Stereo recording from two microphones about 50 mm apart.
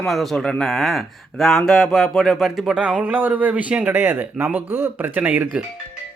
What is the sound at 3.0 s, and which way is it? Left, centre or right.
Speech, right.